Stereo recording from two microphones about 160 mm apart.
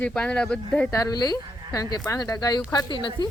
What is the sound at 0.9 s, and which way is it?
Speech, 20° left (ahead or behind).